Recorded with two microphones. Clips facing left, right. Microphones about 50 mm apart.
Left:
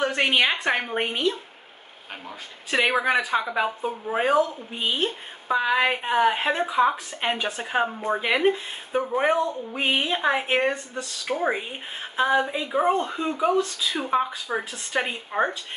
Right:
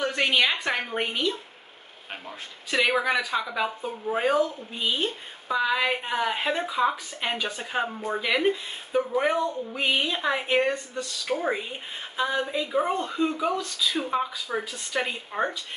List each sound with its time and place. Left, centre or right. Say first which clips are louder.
0.0 s a woman's voice: left 2 dB; left
2.7 s a woman's voice: left 2 dB; left
10.7 s a woman's voice: even; centre
15.3 s speech: left 4 dB; centre